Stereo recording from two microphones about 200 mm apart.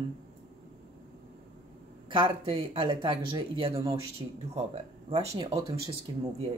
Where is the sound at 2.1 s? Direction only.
25° right (ahead or behind).